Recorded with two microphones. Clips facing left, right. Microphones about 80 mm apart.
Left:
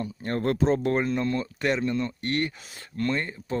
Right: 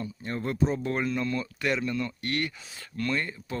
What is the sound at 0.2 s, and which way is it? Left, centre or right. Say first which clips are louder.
Speech: left 3 dB; left.